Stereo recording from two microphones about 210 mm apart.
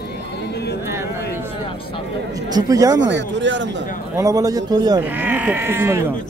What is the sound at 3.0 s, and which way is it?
Speech, 60° right (ahead or behind).